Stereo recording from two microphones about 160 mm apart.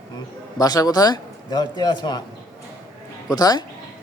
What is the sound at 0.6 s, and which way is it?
Speech, 25° left (ahead or behind).